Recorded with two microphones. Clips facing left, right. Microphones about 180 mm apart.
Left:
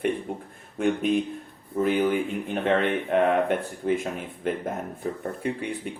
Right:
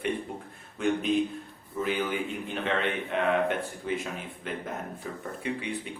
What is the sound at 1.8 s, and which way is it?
Speech, 50° left (ahead or behind).